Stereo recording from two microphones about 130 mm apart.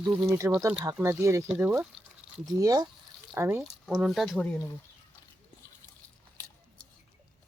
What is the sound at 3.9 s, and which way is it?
Speech, centre (ahead or behind).